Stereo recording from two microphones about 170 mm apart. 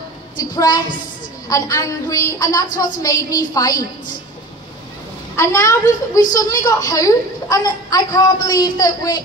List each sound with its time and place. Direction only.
0.4 s a woman's voice: 20° left (ahead or behind)
5.3 s a child's voice: 15° left (ahead or behind)